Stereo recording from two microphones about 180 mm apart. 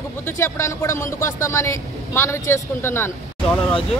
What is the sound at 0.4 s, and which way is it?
Speech, 15° left (ahead or behind).